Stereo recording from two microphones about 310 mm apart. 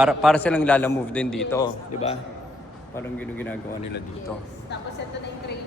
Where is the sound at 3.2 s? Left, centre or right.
Centre.